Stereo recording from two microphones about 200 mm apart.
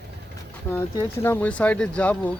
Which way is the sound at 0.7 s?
10° left (ahead or behind).